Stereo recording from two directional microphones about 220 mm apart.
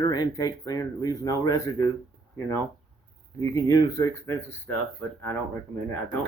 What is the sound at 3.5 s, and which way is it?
Speech, 15° left (ahead or behind).